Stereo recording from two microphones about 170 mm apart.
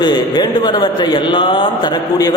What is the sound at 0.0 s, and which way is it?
A man's voice, 25° left (ahead or behind).